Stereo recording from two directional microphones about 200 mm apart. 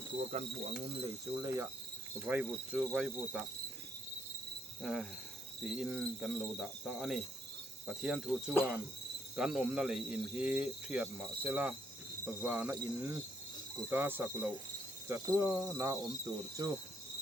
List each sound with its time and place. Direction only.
0.1 s cricket: 25° right (ahead or behind); by 2.5 s 10° right (ahead or behind)
2.7 s speech: 5° right (ahead or behind)
4.8 s speech: centre (ahead or behind)
12.2 s cricket: 10° right (ahead or behind)